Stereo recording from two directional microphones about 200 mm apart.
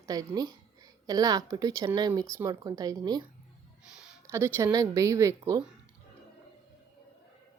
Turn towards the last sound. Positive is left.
turn(degrees=-15)  # may be behind; listen again after turning